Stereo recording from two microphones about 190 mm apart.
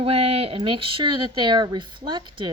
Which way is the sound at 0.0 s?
30° right (ahead or behind).